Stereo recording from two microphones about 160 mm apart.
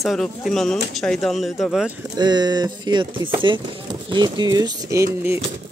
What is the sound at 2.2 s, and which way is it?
Speech, 25° right (ahead or behind).